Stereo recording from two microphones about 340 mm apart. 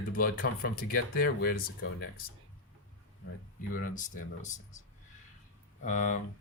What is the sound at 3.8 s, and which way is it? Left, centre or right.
Speech, left.